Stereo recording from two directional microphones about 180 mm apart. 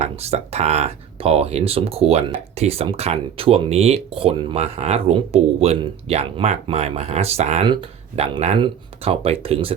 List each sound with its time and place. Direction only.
0.0 s speech: 35° right (ahead or behind)